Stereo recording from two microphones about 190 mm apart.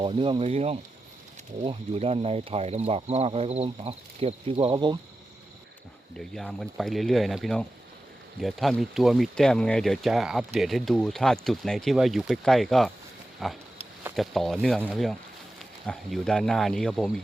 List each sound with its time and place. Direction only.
0.0 s speech: 25° right (ahead or behind)
6.1 s speech: 5° left (ahead or behind)